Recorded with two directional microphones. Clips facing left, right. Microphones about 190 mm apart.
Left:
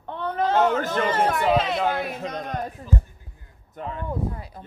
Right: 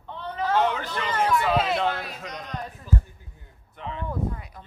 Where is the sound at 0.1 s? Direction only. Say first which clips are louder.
Left 3 dB; 50° left (ahead or behind).